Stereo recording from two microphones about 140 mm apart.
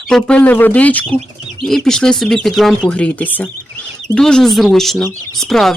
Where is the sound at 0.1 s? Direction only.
5° left (ahead or behind).